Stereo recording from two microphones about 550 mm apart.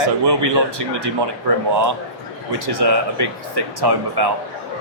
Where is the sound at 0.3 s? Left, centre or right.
Right.